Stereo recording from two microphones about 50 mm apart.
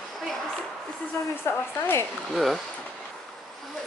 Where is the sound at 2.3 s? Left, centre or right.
Centre.